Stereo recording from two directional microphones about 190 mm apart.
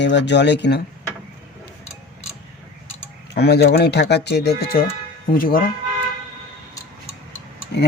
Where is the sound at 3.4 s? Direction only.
60° left (ahead or behind).